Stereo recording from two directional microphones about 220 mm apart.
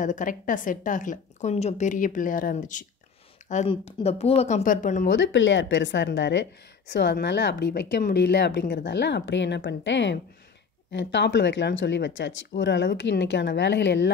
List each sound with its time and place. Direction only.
0.0 s a woman's voice: 35° left (ahead or behind)
5.0 s a woman's voice: 55° left (ahead or behind)